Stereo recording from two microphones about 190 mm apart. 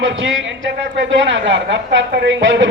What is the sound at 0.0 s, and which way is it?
A man's voice, 75° right (ahead or behind).